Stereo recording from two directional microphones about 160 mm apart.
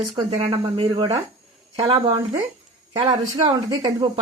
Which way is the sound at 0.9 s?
25° right (ahead or behind).